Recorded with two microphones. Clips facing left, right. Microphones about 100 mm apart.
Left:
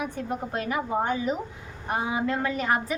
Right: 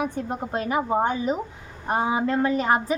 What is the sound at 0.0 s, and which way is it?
A woman's voice, 30° right (ahead or behind).